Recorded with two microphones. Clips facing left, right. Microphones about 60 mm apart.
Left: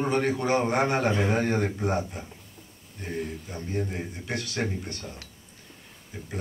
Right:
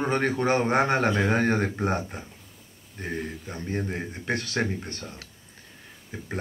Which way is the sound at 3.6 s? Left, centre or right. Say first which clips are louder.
Right 1 dB; right.